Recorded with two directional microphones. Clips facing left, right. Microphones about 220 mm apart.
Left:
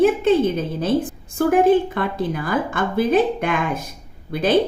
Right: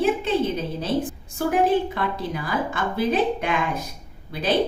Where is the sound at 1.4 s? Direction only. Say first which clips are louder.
Left 5 dB; 50° left (ahead or behind).